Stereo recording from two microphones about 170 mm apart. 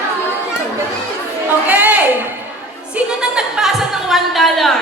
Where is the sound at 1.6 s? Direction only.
10° right (ahead or behind).